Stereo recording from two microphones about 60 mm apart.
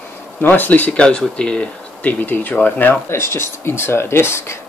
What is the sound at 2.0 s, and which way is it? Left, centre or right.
Speech, left.